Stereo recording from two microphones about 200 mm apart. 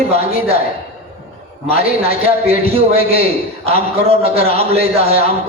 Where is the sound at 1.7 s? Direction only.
30° right (ahead or behind).